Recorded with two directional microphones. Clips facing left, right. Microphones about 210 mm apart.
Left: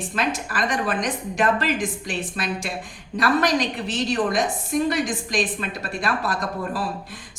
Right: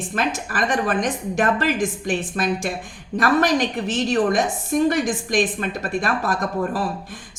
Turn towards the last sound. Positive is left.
turn(degrees=-45)  # may be behind; listen again after turning